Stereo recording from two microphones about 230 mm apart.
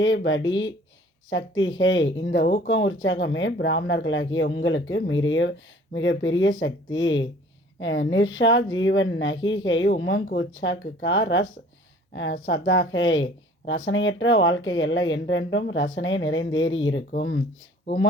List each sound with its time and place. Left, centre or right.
0.0 s speech: left